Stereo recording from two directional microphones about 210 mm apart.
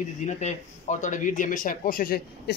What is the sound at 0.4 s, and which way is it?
A man's voice, 35° left (ahead or behind).